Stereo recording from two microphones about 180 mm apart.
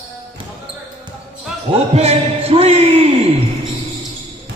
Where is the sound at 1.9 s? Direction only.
35° right (ahead or behind).